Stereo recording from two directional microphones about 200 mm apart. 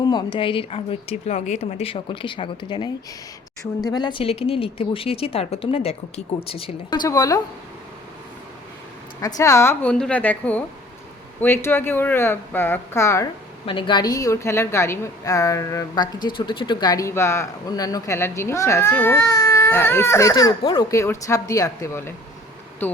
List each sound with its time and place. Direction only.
0.0 s a woman's voice: 20° left (ahead or behind)
9.2 s speech: 15° left (ahead or behind)
13.7 s speech: 25° left (ahead or behind)